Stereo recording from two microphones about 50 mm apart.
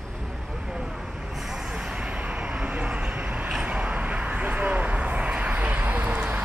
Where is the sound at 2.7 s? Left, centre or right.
Right.